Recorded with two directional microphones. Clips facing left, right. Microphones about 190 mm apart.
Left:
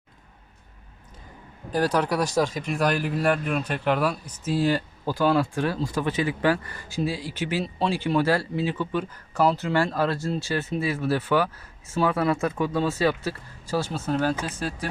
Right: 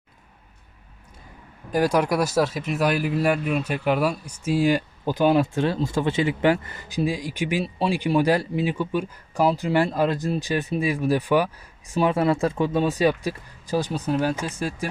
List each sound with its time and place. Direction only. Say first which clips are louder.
1.7 s speech: right 3 dB; 10° right (ahead or behind)